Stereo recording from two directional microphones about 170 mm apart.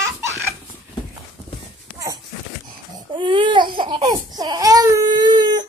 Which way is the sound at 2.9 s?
30° right (ahead or behind).